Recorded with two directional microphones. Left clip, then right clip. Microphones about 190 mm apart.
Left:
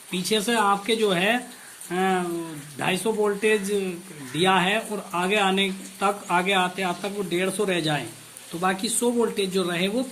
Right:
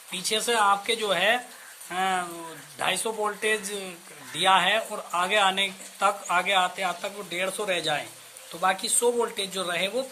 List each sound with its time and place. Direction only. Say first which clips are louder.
0.1 s speech: left 2 dB; 25° right (ahead or behind)